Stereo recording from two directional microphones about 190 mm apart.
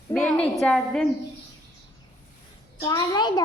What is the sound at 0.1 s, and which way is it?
Speech, 5° left (ahead or behind).